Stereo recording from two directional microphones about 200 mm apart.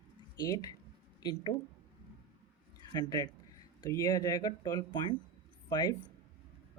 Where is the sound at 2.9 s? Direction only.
20° left (ahead or behind).